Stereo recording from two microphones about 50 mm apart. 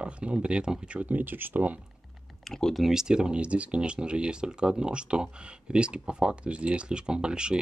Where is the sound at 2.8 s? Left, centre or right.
Centre.